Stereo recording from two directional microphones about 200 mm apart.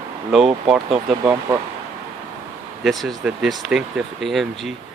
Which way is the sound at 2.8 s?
Centre (ahead or behind).